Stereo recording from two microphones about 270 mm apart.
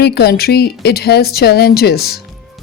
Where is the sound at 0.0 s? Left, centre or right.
Left.